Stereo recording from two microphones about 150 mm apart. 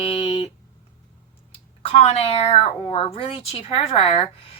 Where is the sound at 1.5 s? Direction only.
40° left (ahead or behind).